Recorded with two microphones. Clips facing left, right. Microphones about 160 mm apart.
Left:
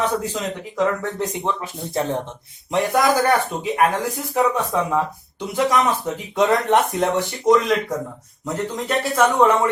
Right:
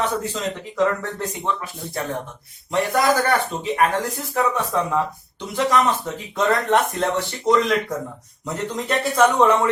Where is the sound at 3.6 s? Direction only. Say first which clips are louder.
Left 1 dB; 5° left (ahead or behind).